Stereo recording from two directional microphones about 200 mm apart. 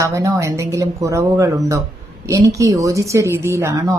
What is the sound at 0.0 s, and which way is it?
Speech, 15° right (ahead or behind).